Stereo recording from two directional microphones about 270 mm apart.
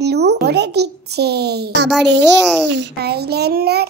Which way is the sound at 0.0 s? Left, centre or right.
Right.